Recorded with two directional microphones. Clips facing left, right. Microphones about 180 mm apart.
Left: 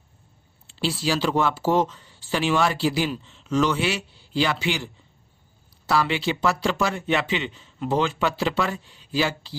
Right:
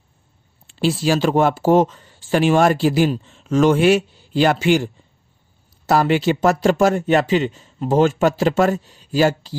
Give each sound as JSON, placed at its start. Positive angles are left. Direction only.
{"t": 0.7, "sound": "speech", "side_deg": -50}